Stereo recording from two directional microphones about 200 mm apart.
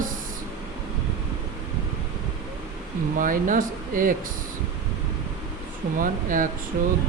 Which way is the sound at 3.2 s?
40° right (ahead or behind).